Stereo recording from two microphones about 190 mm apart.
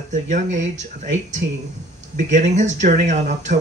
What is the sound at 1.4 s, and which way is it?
Speech, 65° right (ahead or behind).